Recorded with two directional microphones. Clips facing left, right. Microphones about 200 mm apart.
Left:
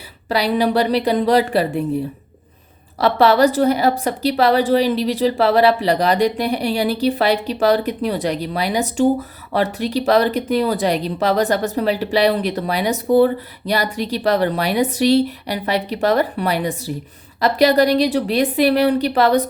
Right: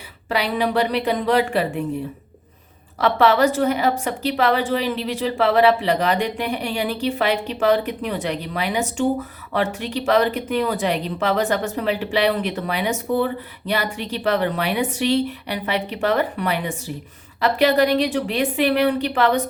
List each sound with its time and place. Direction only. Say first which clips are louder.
0.3 s a woman's voice: left 4 dB; 35° left (ahead or behind)
3.0 s a woman's voice: left 3 dB; 35° left (ahead or behind)